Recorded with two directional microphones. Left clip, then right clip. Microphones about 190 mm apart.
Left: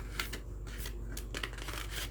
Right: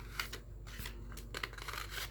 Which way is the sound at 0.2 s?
10° right (ahead or behind).